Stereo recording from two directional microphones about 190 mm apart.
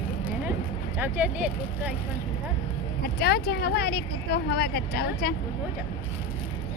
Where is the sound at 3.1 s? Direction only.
55° left (ahead or behind).